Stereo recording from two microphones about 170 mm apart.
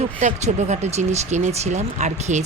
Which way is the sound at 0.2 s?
45° right (ahead or behind).